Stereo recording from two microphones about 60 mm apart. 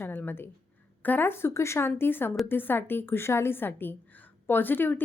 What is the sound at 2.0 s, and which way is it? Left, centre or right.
A woman's voice, left.